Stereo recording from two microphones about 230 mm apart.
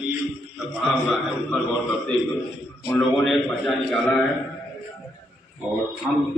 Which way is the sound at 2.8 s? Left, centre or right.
Centre.